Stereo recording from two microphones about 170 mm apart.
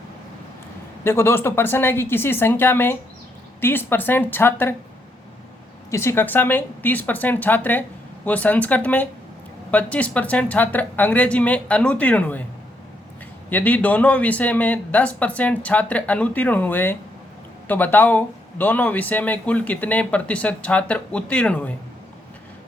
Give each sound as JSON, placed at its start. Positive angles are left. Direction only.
{"t": 1.0, "sound": "speech", "side_deg": 15}
{"t": 5.9, "sound": "speech", "side_deg": 15}
{"t": 13.5, "sound": "speech", "side_deg": 10}